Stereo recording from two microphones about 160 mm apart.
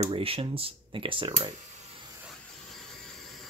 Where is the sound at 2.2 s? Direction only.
Centre (ahead or behind).